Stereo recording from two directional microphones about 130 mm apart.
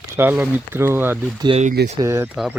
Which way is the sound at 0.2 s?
15° right (ahead or behind).